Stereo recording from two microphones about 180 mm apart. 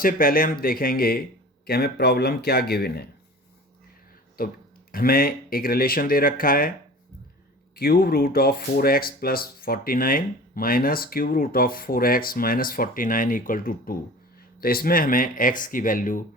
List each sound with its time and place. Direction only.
0.0 s speech: 50° left (ahead or behind)
4.4 s speech: 55° left (ahead or behind)
7.8 s speech: 60° left (ahead or behind)